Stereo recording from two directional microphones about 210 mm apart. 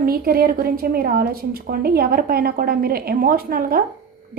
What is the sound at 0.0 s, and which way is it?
A woman's voice, 45° right (ahead or behind).